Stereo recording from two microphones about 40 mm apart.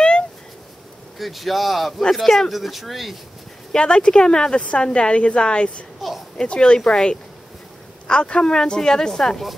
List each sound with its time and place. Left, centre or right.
1.1 s speech: centre
3.7 s speech: left
5.9 s a sound: centre
6.3 s speech: left